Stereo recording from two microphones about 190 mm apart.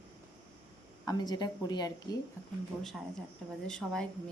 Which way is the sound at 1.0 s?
20° left (ahead or behind).